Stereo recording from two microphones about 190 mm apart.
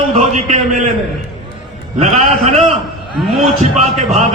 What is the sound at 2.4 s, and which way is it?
A man's voice, 35° right (ahead or behind).